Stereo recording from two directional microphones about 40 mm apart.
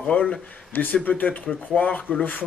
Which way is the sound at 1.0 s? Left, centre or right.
Left.